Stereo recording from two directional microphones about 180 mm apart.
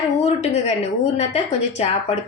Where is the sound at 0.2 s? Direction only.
35° left (ahead or behind).